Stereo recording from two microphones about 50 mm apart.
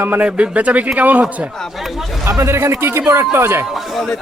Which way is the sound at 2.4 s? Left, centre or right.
Right.